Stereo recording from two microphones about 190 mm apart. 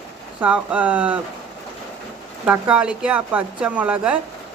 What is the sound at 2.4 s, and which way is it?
A woman's voice, 5° right (ahead or behind).